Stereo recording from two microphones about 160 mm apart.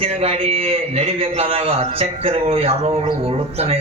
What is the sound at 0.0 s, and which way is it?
A man's voice, 40° right (ahead or behind).